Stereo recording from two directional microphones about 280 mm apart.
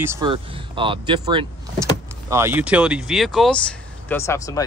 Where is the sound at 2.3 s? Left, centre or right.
Centre.